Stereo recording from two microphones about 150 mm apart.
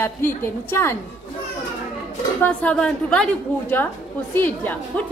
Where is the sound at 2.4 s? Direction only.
10° left (ahead or behind).